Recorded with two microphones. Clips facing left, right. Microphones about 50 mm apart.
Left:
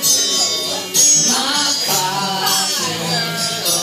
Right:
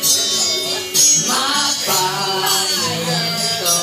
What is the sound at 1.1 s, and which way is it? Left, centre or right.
Music, centre.